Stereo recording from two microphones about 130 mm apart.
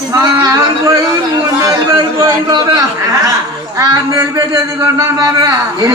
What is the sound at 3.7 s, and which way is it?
A man's voice, 25° right (ahead or behind).